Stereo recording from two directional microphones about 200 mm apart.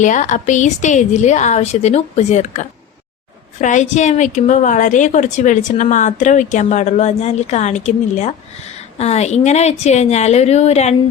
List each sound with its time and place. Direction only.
0.0 s a woman's voice: 40° left (ahead or behind)